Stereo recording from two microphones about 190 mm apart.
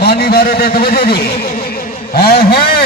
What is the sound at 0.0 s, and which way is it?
A man's voice, 55° left (ahead or behind).